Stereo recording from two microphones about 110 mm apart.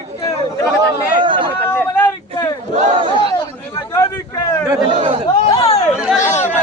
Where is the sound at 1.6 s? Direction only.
20° left (ahead or behind).